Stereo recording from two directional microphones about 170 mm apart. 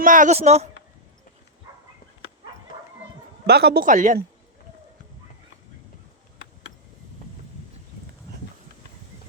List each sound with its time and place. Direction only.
0.0 s speech: 50° right (ahead or behind)
3.4 s a man's voice: 70° right (ahead or behind)
3.8 s a woman's voice: 50° right (ahead or behind)